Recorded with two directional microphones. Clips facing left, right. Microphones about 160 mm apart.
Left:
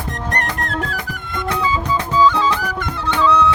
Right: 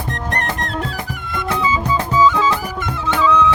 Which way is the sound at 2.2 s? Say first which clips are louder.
Even; 5° right (ahead or behind).